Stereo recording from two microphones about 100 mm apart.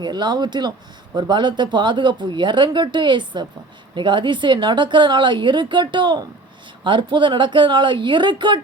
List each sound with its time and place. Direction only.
0.0 s speech: 45° right (ahead or behind)